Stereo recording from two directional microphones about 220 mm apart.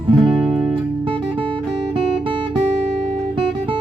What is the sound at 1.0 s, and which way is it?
Music, 25° right (ahead or behind).